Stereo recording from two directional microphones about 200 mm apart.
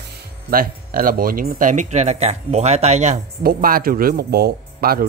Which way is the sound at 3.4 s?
45° right (ahead or behind).